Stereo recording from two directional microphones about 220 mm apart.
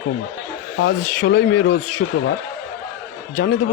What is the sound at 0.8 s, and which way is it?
Speech, 50° left (ahead or behind).